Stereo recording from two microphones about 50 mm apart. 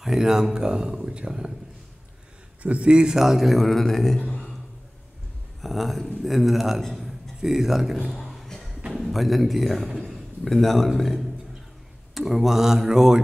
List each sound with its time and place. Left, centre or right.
0.0 s speech: centre
2.6 s a man's voice: right
2.9 s a man's voice: centre
5.6 s a man's voice: centre